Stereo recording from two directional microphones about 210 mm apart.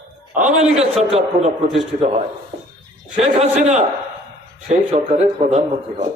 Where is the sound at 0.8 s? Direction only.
30° right (ahead or behind).